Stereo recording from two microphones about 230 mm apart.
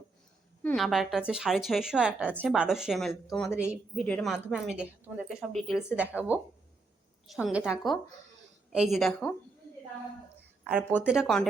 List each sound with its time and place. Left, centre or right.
0.6 s a woman's voice: centre
10.6 s a sound: centre
11.0 s a woman's voice: centre